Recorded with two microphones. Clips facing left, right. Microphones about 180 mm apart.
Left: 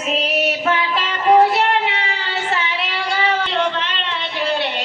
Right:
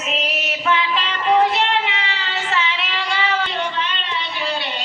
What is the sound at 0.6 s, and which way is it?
Child singing, 45° left (ahead or behind).